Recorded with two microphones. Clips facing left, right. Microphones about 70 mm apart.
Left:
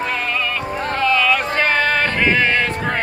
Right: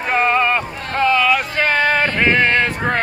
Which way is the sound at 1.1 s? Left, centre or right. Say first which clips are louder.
Right 1 dB; centre.